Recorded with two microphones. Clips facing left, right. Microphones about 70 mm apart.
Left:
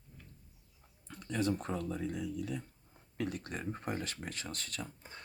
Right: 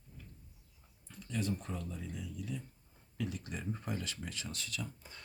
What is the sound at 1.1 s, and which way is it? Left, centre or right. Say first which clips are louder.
Speech: left 4 dB; left.